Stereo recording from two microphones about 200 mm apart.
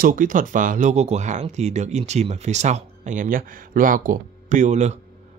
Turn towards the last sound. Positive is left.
turn(degrees=-35)  # may be behind; listen again after turning